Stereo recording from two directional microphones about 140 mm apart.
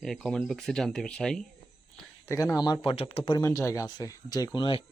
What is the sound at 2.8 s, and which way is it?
Speech, 40° left (ahead or behind).